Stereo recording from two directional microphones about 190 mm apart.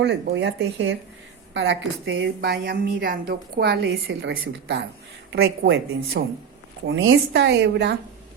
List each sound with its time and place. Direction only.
0.0 s a woman's voice: 65° right (ahead or behind)
6.8 s a woman's voice: 75° right (ahead or behind)